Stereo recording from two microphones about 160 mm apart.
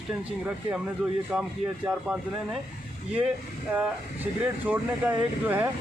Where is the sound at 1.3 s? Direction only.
Centre (ahead or behind).